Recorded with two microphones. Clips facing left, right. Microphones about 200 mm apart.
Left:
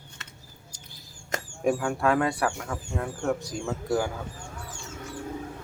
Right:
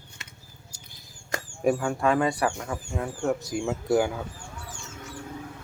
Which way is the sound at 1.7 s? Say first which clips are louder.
Right 1 dB; centre (ahead or behind).